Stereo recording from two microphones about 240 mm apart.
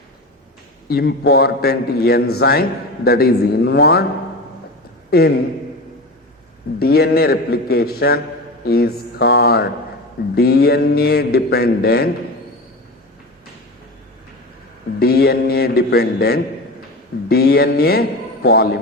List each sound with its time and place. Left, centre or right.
0.9 s speech: left
6.7 s speech: left
14.9 s speech: left